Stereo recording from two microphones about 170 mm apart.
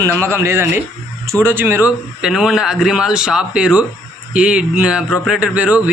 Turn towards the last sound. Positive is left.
turn(degrees=-5)  # may be behind; listen again after turning